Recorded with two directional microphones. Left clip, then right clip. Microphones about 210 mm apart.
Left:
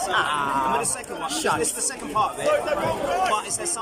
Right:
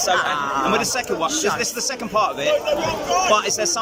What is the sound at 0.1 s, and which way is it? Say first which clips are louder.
Speech: right 2 dB; 5° left (ahead or behind).